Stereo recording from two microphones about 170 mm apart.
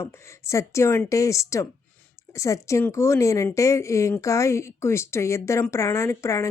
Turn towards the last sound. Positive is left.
turn(degrees=20)  # may be behind; listen again after turning